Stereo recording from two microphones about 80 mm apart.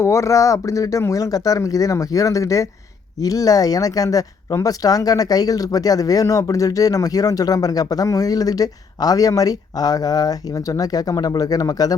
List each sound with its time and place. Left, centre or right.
0.0 s speech: left